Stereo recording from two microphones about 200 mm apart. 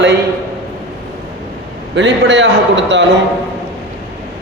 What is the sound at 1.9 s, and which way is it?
A man's voice, 65° right (ahead or behind).